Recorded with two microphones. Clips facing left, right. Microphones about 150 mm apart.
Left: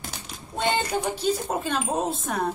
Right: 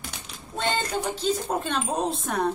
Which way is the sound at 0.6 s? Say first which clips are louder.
Left 2 dB; 10° left (ahead or behind).